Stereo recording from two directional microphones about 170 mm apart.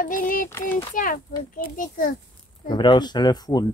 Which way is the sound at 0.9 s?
55° left (ahead or behind).